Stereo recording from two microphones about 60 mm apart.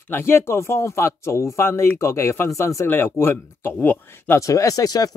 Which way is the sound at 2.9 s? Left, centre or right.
Left.